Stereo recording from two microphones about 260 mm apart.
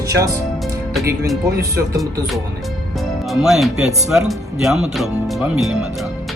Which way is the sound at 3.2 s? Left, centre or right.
Centre.